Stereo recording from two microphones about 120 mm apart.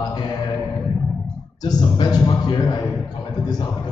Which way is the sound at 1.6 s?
35° left (ahead or behind).